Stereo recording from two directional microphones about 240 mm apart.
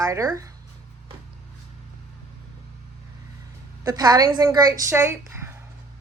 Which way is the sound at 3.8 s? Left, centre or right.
Centre.